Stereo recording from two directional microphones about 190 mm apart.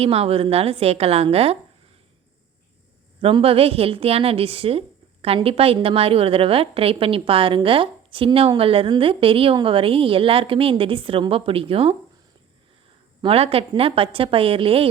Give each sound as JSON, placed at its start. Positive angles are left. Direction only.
{"t": 0.0, "sound": "a woman's voice", "side_deg": -30}
{"t": 3.2, "sound": "a woman's voice", "side_deg": -30}
{"t": 13.2, "sound": "a woman's voice", "side_deg": -30}